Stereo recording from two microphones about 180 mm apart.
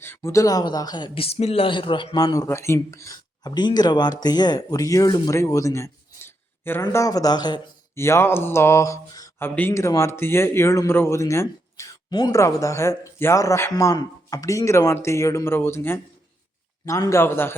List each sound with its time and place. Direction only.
0.0 s speech: 15° left (ahead or behind)